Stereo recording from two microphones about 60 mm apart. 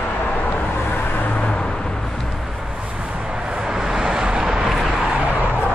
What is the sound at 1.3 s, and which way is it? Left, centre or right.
Vehicle, centre.